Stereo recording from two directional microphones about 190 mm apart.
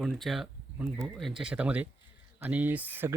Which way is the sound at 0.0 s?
Centre (ahead or behind).